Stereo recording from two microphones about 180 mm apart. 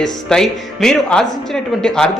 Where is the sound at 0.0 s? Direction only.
5° left (ahead or behind).